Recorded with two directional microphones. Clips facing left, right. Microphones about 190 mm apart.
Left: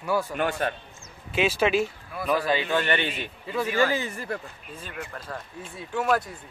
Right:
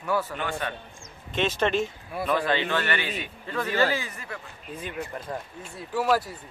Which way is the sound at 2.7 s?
20° left (ahead or behind).